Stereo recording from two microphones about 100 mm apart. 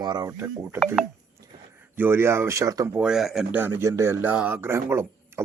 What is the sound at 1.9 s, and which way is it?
Speech, 20° right (ahead or behind).